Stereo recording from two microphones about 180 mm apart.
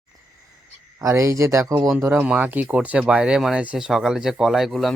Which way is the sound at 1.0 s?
15° right (ahead or behind).